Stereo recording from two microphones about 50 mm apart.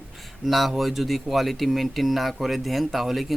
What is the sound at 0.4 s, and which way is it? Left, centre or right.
Speech, centre.